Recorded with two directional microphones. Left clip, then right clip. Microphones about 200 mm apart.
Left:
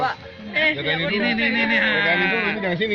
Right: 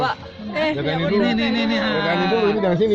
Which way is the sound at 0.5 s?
40° right (ahead or behind).